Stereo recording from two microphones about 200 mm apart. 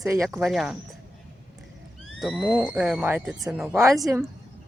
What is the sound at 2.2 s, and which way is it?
Speech, 5° right (ahead or behind).